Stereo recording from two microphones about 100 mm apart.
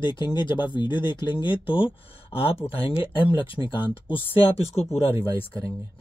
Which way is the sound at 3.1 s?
55° left (ahead or behind).